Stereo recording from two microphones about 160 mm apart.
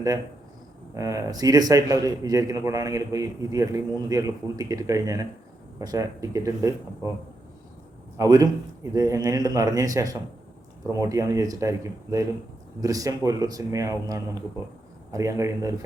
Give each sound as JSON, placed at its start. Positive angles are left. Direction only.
{"t": 0.9, "sound": "a man's voice", "side_deg": -20}
{"t": 8.2, "sound": "a man's voice", "side_deg": -20}